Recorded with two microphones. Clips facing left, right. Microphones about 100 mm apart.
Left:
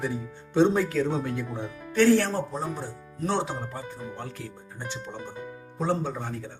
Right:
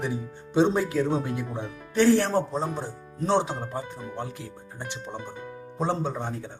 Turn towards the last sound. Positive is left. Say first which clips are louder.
# even
turn(degrees=-20)  # may be behind; listen again after turning